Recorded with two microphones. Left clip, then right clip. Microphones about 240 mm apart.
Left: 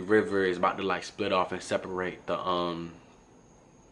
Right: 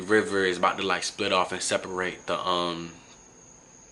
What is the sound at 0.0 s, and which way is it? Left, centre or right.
Speech, centre.